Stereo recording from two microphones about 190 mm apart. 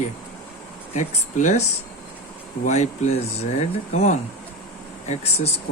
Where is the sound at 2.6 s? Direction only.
40° left (ahead or behind).